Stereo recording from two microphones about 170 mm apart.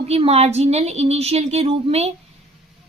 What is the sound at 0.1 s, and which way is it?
Speech, 35° right (ahead or behind).